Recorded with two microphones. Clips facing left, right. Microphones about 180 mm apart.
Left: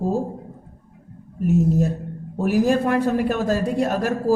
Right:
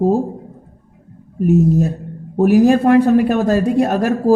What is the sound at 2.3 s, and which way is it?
A man's voice, 70° right (ahead or behind).